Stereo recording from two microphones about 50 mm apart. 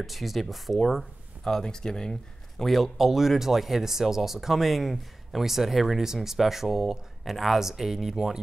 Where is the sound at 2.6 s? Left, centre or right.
Centre.